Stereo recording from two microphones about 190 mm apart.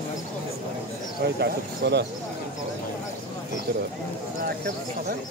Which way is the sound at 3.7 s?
55° right (ahead or behind).